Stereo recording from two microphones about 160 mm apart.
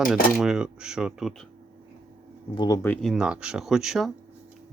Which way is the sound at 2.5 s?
30° left (ahead or behind).